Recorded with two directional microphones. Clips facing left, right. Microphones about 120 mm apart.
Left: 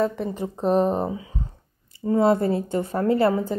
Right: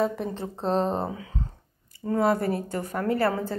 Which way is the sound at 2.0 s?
25° left (ahead or behind).